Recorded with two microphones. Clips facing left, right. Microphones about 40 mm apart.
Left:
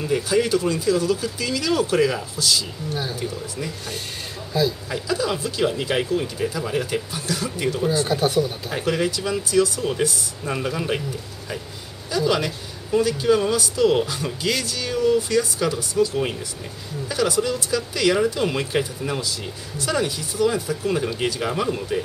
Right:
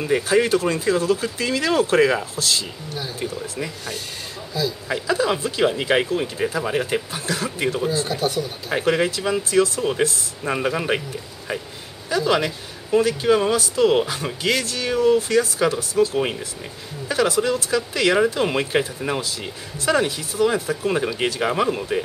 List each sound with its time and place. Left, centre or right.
0.0 s speech: right
4.9 s speech: right
7.8 s speech: centre
8.2 s speech: centre
8.6 s speech: right
12.1 s speech: right